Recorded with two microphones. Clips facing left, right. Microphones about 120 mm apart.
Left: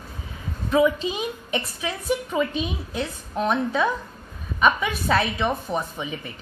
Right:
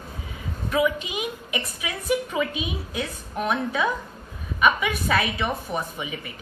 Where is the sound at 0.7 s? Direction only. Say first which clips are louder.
Left 4 dB; 30° left (ahead or behind).